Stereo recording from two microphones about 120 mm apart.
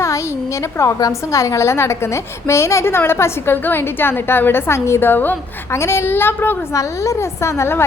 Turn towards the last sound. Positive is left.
turn(degrees=20)  # may be behind; listen again after turning